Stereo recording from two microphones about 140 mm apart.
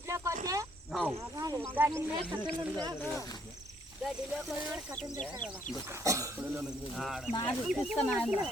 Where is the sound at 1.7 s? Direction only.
15° right (ahead or behind).